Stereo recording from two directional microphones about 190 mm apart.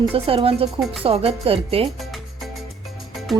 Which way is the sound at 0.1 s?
30° right (ahead or behind).